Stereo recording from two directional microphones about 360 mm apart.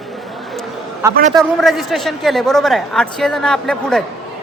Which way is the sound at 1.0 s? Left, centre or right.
Centre.